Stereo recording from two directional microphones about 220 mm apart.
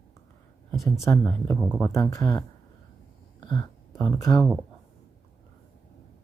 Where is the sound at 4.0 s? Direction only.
15° left (ahead or behind).